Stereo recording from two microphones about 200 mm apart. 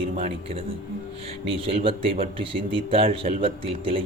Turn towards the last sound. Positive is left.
turn(degrees=-25)  # may be behind; listen again after turning